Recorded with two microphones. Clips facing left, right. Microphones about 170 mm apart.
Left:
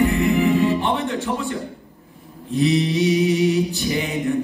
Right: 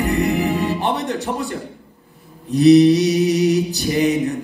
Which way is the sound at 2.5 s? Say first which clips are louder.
Right 9 dB; 40° right (ahead or behind).